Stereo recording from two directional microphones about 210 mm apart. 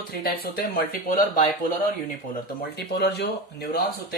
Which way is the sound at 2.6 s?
50° left (ahead or behind).